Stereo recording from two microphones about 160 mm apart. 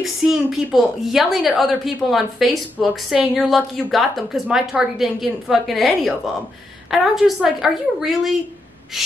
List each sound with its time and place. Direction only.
0.0 s a woman's voice: centre (ahead or behind)